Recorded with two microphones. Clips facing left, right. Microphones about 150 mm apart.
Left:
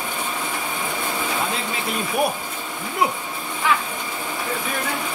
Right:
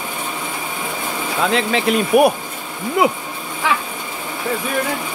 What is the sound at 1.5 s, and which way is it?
Speech, 85° right.